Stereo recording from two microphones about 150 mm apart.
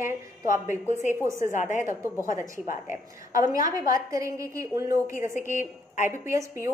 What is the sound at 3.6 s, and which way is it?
A woman's voice, 20° right (ahead or behind).